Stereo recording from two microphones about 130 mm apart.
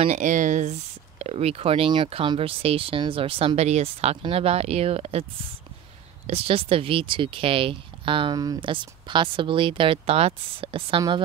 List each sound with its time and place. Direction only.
0.1 s speech: 75° right (ahead or behind)
1.2 s speech: 50° right (ahead or behind)
6.2 s speech: 50° right (ahead or behind)